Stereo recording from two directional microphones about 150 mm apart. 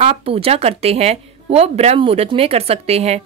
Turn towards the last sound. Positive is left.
turn(degrees=-45)  # may be behind; listen again after turning